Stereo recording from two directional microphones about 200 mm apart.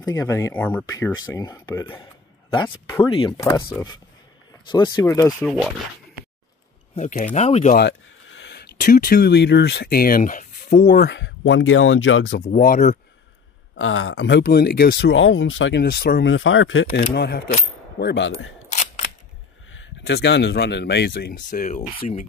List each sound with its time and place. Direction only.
0.0 s speech: 15° left (ahead or behind)
7.0 s speech: 40° left (ahead or behind)
8.3 s speech: 60° left (ahead or behind); by 11.1 s 40° left (ahead or behind)
11.1 s speech: 60° left (ahead or behind)
12.4 s speech: 40° left (ahead or behind)
13.7 s speech: 80° left; by 14.4 s 65° left (ahead or behind)
14.4 s speech: 50° left (ahead or behind)
16.3 s speech: 70° left (ahead or behind)
17.1 s speech: 55° left (ahead or behind)
18.7 s single-lens reflex camera: 35° left (ahead or behind)
19.7 s speech: 65° left (ahead or behind); by 22.2 s 40° left (ahead or behind)